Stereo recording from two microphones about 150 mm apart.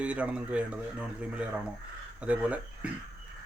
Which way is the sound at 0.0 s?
10° right (ahead or behind).